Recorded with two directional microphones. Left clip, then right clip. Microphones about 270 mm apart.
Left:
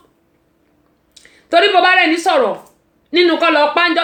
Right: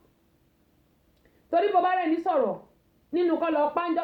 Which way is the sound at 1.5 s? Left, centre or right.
Centre.